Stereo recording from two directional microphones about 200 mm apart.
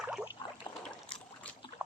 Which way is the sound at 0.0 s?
5° right (ahead or behind).